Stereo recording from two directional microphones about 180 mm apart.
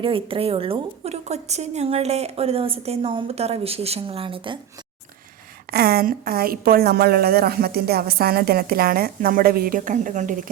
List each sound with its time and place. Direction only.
0.0 s a woman's voice: 30° right (ahead or behind)
5.7 s a woman's voice: 60° right (ahead or behind)